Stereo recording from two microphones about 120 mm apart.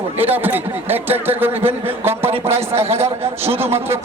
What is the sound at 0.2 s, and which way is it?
A man's voice, 15° right (ahead or behind).